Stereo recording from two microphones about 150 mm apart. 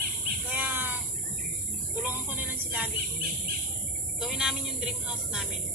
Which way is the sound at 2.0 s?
15° right (ahead or behind).